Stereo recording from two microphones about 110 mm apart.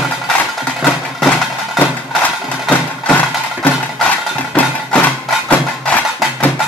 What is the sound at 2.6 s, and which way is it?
Music, 10° left (ahead or behind).